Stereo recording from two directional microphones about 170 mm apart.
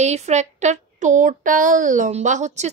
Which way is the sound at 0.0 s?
40° right (ahead or behind).